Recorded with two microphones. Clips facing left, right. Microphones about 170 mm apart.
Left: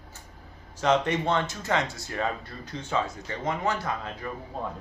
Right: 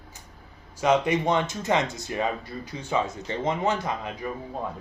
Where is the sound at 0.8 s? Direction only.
10° right (ahead or behind).